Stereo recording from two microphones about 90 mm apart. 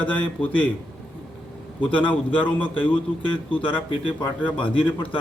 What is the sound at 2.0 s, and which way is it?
Speech, 70° left (ahead or behind).